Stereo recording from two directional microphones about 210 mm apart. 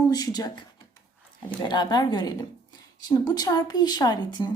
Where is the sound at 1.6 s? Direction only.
20° left (ahead or behind).